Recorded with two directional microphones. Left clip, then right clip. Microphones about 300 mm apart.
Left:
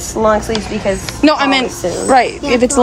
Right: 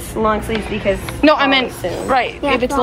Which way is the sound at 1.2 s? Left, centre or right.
Centre.